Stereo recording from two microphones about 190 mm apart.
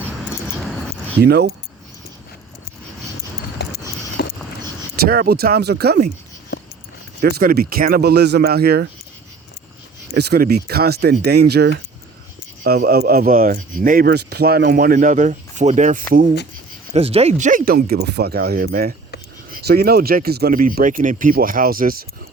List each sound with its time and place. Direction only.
1.2 s speech: 60° right (ahead or behind)
3.6 s a sound: 60° left (ahead or behind)
5.0 s speech: 50° right (ahead or behind)
7.2 s speech: 55° right (ahead or behind)
10.2 s speech: 55° right (ahead or behind)
16.9 s speech: 30° right (ahead or behind); by 21.9 s 50° right (ahead or behind)